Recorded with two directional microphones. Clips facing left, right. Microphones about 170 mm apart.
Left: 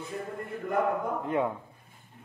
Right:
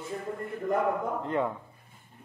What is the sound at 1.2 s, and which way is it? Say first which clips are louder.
Speech: left 1 dB; 10° left (ahead or behind).